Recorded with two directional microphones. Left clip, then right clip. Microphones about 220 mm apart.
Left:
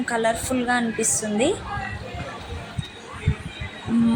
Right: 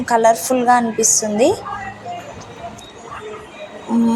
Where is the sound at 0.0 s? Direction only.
Centre (ahead or behind).